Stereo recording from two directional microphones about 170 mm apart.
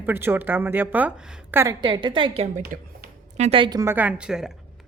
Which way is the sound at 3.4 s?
30° right (ahead or behind).